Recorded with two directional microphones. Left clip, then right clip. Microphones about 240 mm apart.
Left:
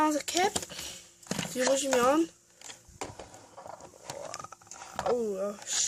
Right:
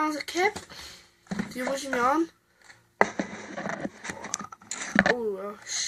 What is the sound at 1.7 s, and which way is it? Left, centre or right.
Speech, left.